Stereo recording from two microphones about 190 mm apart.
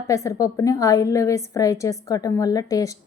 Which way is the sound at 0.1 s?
15° left (ahead or behind).